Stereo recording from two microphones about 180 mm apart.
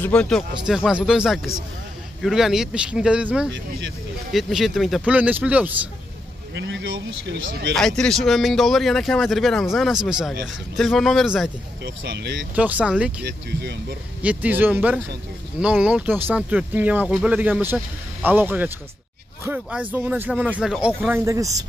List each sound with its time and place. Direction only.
0.0 s speech: 5° left (ahead or behind)
6.5 s speech: 85° right
7.7 s speech: 5° left (ahead or behind)
11.8 s speech: 75° right (ahead or behind)
12.5 s speech: 10° right (ahead or behind)
13.2 s speech: 70° right (ahead or behind)
14.2 s speech: 10° right (ahead or behind)
21.1 s speech: 15° right (ahead or behind)